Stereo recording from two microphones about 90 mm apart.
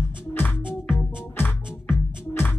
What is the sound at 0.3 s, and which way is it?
Music, 20° left (ahead or behind).